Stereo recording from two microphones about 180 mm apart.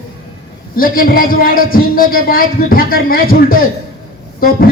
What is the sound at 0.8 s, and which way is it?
A man's voice, 55° left (ahead or behind).